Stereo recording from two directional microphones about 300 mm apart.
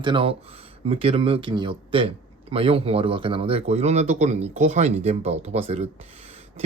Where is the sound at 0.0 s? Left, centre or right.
Centre.